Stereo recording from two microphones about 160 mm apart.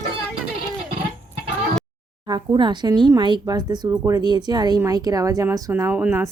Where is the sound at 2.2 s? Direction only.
30° right (ahead or behind).